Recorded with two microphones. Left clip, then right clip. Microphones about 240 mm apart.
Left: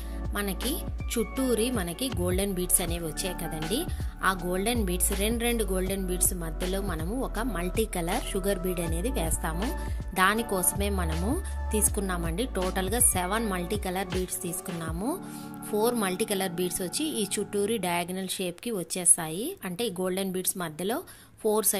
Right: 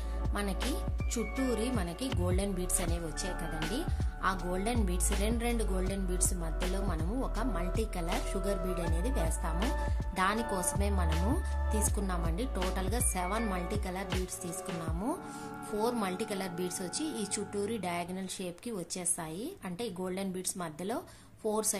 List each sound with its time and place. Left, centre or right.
0.3 s speech: centre
12.1 s speech: centre